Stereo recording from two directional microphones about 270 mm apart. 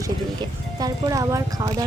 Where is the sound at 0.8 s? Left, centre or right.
Centre.